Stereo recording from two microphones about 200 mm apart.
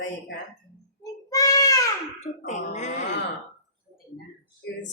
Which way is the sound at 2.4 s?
35° left (ahead or behind).